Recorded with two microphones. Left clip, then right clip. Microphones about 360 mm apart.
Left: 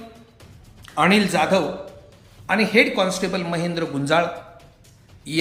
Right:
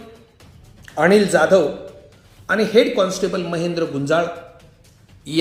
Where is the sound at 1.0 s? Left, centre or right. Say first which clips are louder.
Right 4 dB; centre.